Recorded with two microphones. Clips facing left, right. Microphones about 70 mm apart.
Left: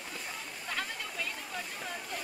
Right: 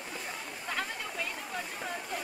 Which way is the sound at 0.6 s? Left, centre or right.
Centre.